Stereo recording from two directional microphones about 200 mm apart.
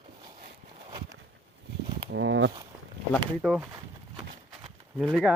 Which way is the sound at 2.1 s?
70° right (ahead or behind).